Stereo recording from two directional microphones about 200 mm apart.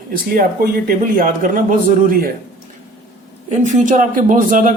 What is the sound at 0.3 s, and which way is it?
Speech, 45° right (ahead or behind).